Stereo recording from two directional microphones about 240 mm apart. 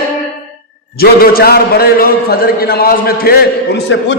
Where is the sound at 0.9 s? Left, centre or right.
Left.